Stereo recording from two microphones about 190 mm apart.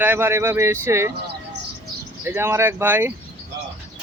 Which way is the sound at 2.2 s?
10° right (ahead or behind).